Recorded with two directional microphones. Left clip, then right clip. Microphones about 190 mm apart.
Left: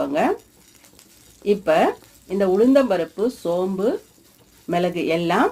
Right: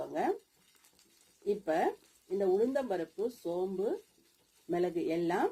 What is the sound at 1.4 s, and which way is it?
Speech, 10° left (ahead or behind).